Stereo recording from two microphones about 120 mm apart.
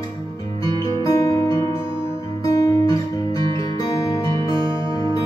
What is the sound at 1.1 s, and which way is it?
Music, 30° left (ahead or behind).